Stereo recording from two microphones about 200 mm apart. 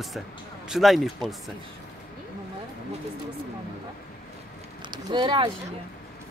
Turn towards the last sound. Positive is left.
turn(degrees=-20)  # may be behind; listen again after turning